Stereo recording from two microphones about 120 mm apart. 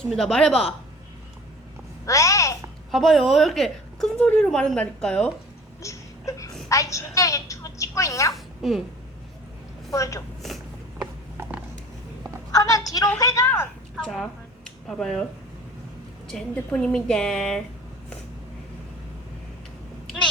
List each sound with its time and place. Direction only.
0.2 s a woman's voice: 5° left (ahead or behind)
2.0 s a sound: 25° left (ahead or behind)
2.9 s a woman's voice: centre (ahead or behind)
5.8 s a sound: 25° left (ahead or behind)
6.7 s a woman's voice: 25° left (ahead or behind)
8.3 s a child's voice: centre (ahead or behind)
9.9 s a woman's voice: 25° left (ahead or behind)
11.0 s mechanisms: 15° right (ahead or behind)
12.5 s a woman's voice: 30° left (ahead or behind)
13.9 s a sound: centre (ahead or behind)
16.2 s a woman's voice: 5° left (ahead or behind)